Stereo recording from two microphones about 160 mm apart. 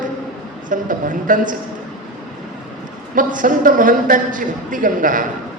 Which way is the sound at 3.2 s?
55° right (ahead or behind).